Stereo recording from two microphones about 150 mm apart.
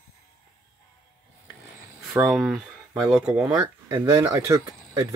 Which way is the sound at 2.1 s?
5° right (ahead or behind).